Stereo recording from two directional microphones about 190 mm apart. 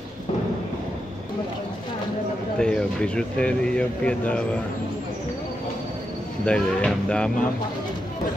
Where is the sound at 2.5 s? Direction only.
5° left (ahead or behind).